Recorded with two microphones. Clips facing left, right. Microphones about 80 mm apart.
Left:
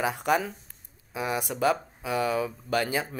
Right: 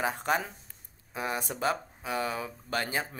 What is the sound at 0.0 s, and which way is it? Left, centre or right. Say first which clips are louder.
Speech: left 4 dB; right.